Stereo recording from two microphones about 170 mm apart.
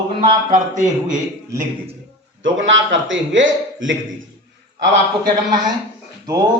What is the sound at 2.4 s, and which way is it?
A man's voice, 90° right.